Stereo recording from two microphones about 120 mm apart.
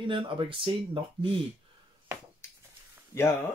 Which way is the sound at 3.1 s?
20° left (ahead or behind).